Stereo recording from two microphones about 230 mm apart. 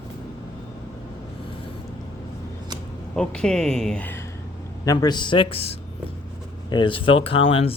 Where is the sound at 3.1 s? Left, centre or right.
Centre.